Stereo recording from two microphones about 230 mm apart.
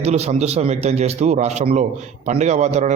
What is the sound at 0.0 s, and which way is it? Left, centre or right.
A man's voice, right.